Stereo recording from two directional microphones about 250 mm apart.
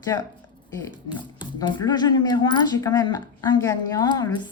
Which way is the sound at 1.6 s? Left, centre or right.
Centre.